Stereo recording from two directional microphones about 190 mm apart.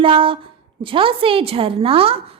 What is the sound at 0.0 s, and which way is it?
A woman's voice, 25° right (ahead or behind).